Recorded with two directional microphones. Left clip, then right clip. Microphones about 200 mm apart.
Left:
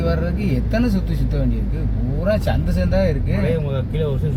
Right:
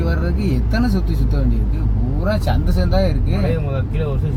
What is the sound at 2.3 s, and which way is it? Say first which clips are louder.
Speech: left 2 dB; 50° right (ahead or behind).